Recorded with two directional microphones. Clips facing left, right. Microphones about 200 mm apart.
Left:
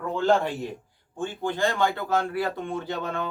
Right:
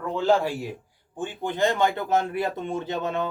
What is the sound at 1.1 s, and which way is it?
A man's voice, 15° right (ahead or behind).